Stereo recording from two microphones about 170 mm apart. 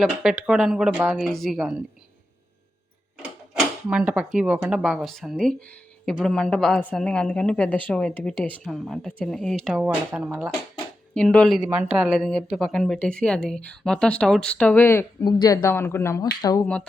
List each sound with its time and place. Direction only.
0.0 s speech: 5° right (ahead or behind)
3.5 s speech: 5° right (ahead or behind)
11.1 s speech: 5° left (ahead or behind); by 16.6 s 25° left (ahead or behind)